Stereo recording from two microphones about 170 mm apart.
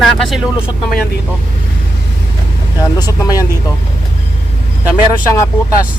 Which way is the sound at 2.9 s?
20° left (ahead or behind).